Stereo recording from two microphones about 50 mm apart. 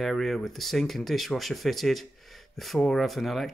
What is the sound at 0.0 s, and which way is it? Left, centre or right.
Speech, centre.